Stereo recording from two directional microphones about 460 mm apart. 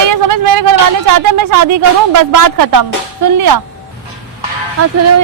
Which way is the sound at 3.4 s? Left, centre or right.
Right.